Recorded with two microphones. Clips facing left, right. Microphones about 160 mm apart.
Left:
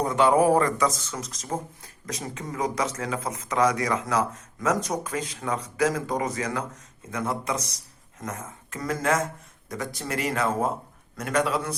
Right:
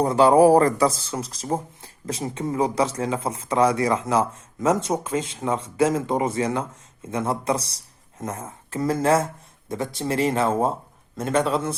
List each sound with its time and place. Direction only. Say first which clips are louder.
0.0 s speech: right 5 dB; 35° right (ahead or behind)